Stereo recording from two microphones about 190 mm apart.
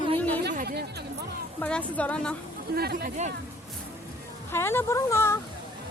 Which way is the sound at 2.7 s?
55° right (ahead or behind).